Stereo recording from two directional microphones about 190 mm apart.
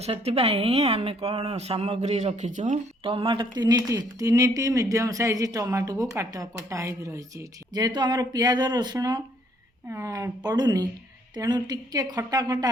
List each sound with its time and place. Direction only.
0.0 s a woman's voice: 35° right (ahead or behind)